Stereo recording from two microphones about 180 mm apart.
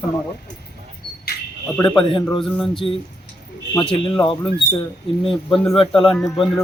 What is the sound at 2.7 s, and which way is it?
Speech, 30° left (ahead or behind).